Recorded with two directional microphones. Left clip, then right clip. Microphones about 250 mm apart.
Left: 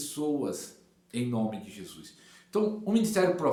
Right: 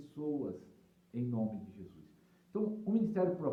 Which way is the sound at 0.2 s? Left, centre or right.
Left.